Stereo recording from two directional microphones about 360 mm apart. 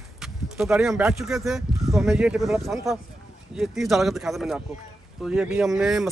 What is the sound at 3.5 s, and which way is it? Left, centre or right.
Speech, centre.